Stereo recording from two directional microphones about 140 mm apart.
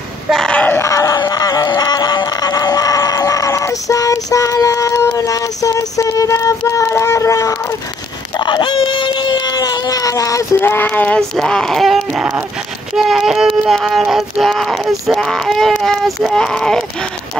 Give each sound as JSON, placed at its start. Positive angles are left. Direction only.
{"t": 0.3, "sound": "screaming", "side_deg": 5}
{"t": 8.4, "sound": "baby cry", "side_deg": 35}
{"t": 11.3, "sound": "speech", "side_deg": 5}